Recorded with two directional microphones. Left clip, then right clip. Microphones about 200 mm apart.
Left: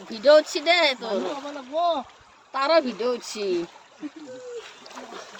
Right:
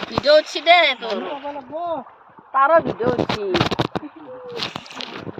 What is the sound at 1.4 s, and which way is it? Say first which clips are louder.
Speech: left 2 dB; 30° right (ahead or behind).